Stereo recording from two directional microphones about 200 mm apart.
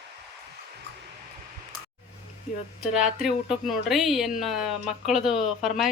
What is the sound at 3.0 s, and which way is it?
Speech, centre (ahead or behind).